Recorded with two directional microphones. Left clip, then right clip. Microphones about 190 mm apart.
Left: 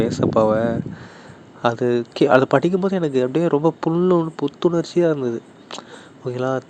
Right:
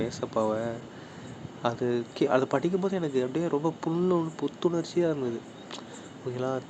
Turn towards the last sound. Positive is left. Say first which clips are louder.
# left 8 dB
turn(degrees=35)  # may be behind; listen again after turning